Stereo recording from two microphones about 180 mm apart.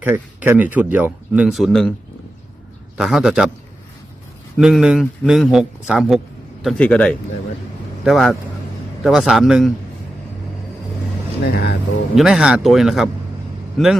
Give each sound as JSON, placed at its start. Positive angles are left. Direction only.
{"t": 0.0, "sound": "speech", "side_deg": -10}
{"t": 3.0, "sound": "a man's voice", "side_deg": -5}
{"t": 4.6, "sound": "a man's voice", "side_deg": -5}
{"t": 11.4, "sound": "speech", "side_deg": 65}
{"t": 12.1, "sound": "a man's voice", "side_deg": 0}